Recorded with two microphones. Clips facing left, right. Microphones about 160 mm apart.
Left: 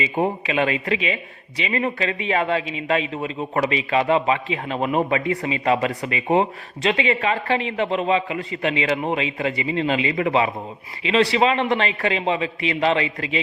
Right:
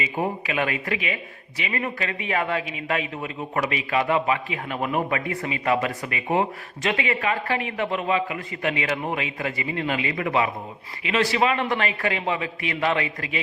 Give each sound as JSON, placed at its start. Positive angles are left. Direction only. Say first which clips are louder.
{"t": 0.0, "sound": "a man's voice", "louder": "left 4 dB", "side_deg": 25}